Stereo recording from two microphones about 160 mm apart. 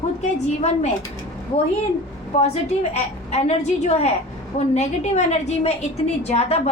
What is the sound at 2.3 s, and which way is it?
A woman's voice, 40° left (ahead or behind).